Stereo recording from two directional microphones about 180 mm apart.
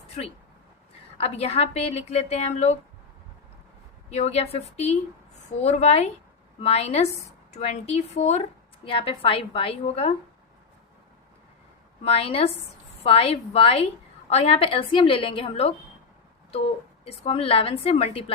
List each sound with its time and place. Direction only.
0.2 s a woman's voice: 35° left (ahead or behind)
4.1 s a woman's voice: 35° left (ahead or behind)
12.0 s a woman's voice: 35° left (ahead or behind)
17.1 s a woman's voice: 35° left (ahead or behind)